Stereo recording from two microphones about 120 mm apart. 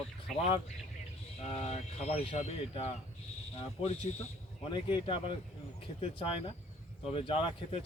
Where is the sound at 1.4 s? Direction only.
60° left (ahead or behind).